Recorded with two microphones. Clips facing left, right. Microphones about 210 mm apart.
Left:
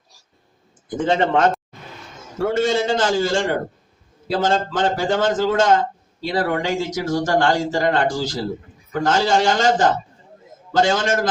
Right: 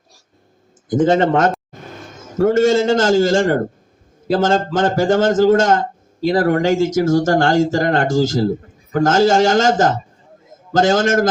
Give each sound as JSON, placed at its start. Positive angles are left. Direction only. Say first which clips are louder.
{"t": 0.9, "sound": "speech", "louder": "right 5 dB", "side_deg": -45}